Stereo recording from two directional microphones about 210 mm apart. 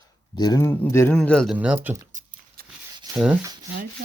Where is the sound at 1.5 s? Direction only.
5° right (ahead or behind).